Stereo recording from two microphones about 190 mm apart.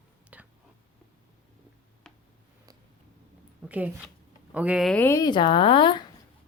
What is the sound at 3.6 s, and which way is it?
Speech, 10° right (ahead or behind).